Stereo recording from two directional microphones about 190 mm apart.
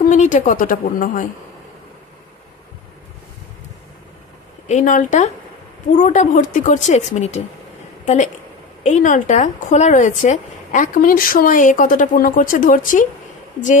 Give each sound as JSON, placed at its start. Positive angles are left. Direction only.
{"t": 0.1, "sound": "a woman's voice", "side_deg": 40}
{"t": 4.6, "sound": "a woman's voice", "side_deg": 40}